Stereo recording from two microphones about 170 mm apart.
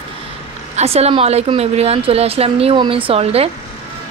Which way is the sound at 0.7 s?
40° right (ahead or behind).